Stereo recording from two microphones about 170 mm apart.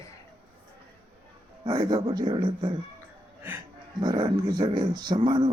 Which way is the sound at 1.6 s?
25° right (ahead or behind).